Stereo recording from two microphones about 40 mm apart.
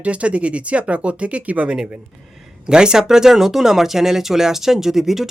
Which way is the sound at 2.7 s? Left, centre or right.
Centre.